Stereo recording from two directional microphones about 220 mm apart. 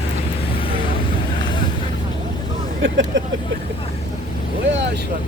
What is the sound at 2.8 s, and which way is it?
Speech, 55° right (ahead or behind).